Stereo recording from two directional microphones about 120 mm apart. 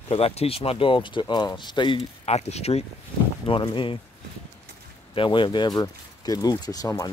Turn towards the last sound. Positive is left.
turn(degrees=30)  # may be behind; listen again after turning